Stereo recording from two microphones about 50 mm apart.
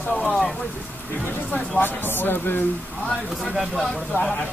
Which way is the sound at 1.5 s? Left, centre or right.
Left.